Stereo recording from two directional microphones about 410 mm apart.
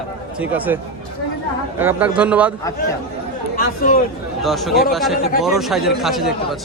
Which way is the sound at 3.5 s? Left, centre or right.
Left.